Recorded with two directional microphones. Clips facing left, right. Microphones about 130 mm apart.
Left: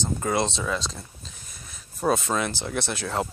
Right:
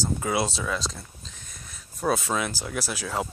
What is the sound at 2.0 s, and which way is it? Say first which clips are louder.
Speech: left 2 dB; centre (ahead or behind).